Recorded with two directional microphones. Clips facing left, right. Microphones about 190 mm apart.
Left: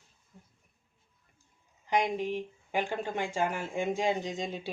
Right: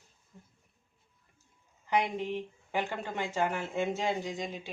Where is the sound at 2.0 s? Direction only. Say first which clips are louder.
Left 2 dB; 15° left (ahead or behind).